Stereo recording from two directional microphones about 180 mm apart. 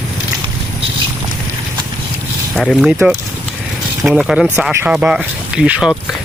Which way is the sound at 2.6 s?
Centre (ahead or behind).